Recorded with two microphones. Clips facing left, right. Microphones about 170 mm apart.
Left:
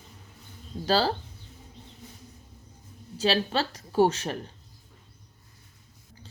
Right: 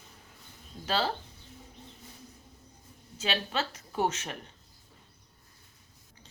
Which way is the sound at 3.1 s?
35° left (ahead or behind).